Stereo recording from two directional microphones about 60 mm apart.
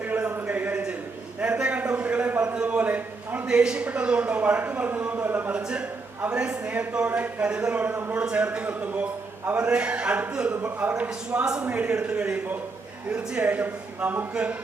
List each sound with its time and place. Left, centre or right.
0.2 s a sound: right
2.6 s a man's voice: right
3.4 s a man's voice: centre; by 5.5 s right
5.5 s a man's voice: centre
7.8 s a man's voice: right
11.3 s a man's voice: centre